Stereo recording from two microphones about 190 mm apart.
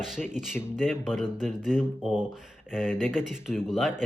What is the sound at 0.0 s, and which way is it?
Speech, 5° right (ahead or behind).